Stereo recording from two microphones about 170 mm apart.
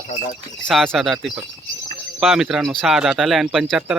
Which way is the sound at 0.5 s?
5° left (ahead or behind).